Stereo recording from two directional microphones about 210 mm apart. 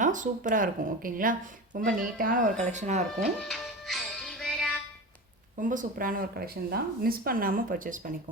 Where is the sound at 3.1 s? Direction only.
Centre (ahead or behind).